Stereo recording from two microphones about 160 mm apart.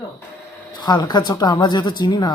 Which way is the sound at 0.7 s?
25° left (ahead or behind).